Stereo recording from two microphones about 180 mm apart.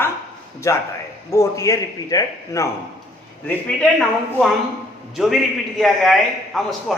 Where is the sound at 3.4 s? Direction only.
5° left (ahead or behind).